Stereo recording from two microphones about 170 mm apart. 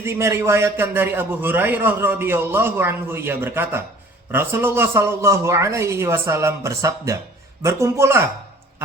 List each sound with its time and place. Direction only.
0.0 s a man's voice: 15° right (ahead or behind)